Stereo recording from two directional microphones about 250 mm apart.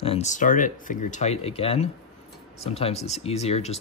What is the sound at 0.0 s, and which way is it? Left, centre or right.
Speech, left.